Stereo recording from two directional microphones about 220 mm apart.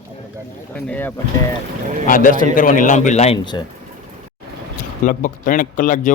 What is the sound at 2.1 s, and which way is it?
Speech, 40° left (ahead or behind).